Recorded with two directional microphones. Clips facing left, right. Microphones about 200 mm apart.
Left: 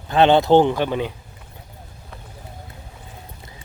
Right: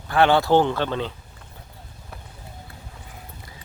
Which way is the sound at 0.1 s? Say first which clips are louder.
Left 4 dB; 20° left (ahead or behind).